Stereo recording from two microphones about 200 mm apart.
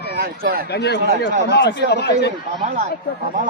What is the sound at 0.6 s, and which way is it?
Speech, 55° left (ahead or behind).